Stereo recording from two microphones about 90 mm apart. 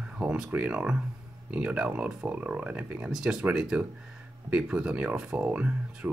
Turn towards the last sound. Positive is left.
turn(degrees=-15)  # may be behind; listen again after turning